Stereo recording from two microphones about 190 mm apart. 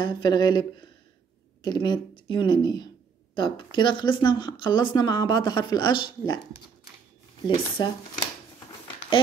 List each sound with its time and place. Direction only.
0.0 s speech: 25° left (ahead or behind)
7.4 s speech: 25° left (ahead or behind)